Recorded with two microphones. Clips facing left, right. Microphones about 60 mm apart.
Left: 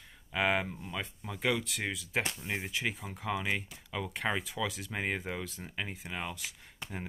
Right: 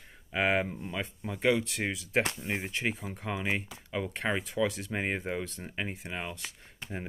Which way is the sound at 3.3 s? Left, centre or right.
Centre.